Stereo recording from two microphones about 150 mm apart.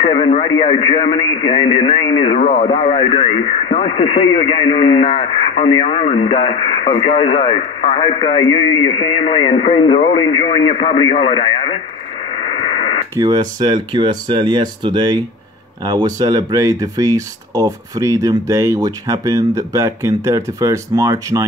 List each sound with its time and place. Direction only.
0.0 s a man's voice: 35° left (ahead or behind)
13.1 s speech: 25° right (ahead or behind)